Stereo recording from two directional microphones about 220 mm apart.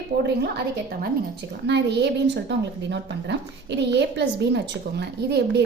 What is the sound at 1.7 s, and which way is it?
A woman's voice, 50° right (ahead or behind).